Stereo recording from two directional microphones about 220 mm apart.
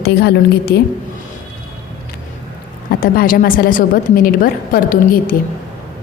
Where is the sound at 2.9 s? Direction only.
40° left (ahead or behind).